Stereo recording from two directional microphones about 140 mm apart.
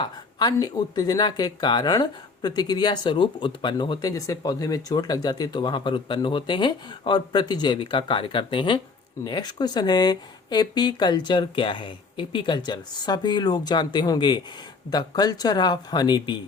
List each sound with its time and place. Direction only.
0.0 s speech: 30° left (ahead or behind)